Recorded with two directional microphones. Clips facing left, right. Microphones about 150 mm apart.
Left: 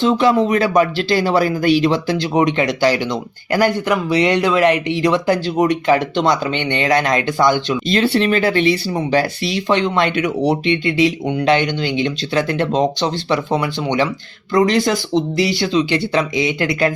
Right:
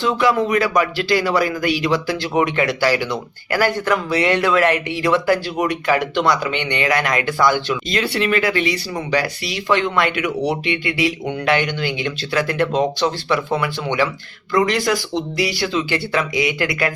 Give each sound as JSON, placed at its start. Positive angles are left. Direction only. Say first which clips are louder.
{"t": 0.0, "sound": "speech", "louder": "left 3 dB", "side_deg": 25}